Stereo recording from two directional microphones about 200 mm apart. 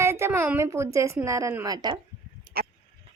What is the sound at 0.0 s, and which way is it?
A woman's voice, 10° right (ahead or behind).